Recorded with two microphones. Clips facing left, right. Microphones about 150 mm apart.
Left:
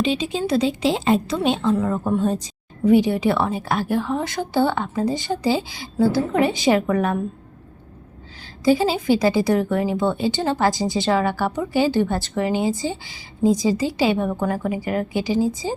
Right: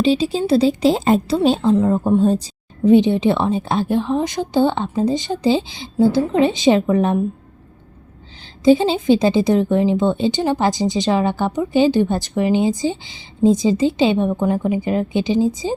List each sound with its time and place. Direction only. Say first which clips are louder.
0.0 s a woman's voice: right 5 dB; 35° right (ahead or behind)
8.6 s a woman's voice: right 4 dB; 25° right (ahead or behind)